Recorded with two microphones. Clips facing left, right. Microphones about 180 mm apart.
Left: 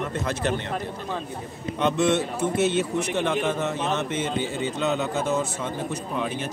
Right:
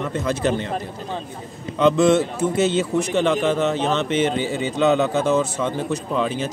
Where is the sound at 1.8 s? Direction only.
90° right.